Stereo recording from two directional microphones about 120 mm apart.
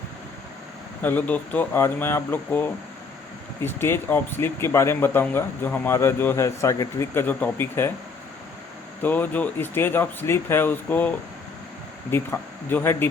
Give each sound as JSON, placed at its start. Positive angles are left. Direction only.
{"t": 1.0, "sound": "speech", "side_deg": 15}
{"t": 9.0, "sound": "speech", "side_deg": 15}
{"t": 12.1, "sound": "speech", "side_deg": 20}